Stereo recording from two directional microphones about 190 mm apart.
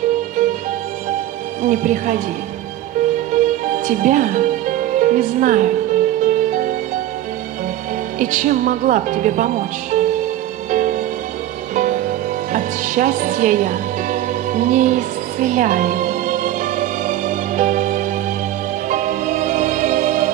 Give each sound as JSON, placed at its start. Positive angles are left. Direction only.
{"t": 1.6, "sound": "speech", "side_deg": -40}
{"t": 3.3, "sound": "music", "side_deg": -40}
{"t": 8.2, "sound": "speech", "side_deg": -40}
{"t": 10.7, "sound": "music", "side_deg": -40}